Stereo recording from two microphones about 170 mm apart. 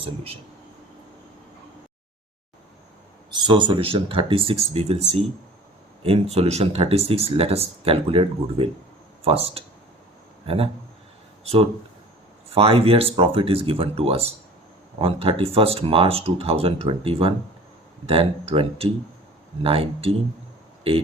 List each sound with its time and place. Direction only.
3.3 s speech: 25° right (ahead or behind)